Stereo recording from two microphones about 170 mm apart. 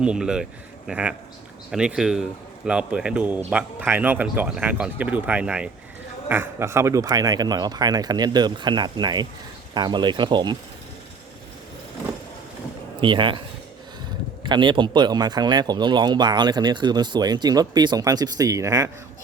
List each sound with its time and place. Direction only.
0.0 s speech: 5° right (ahead or behind); by 10.6 s 25° right (ahead or behind)
13.0 s speech: 30° right (ahead or behind)
14.4 s speech: 25° right (ahead or behind)